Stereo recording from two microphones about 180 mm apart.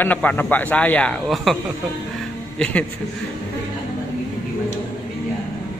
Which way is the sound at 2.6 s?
10° left (ahead or behind).